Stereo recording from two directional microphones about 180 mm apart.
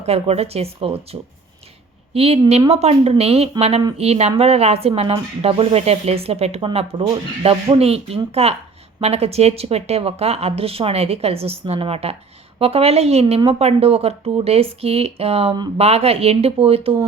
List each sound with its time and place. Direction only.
0.0 s speech: 35° right (ahead or behind)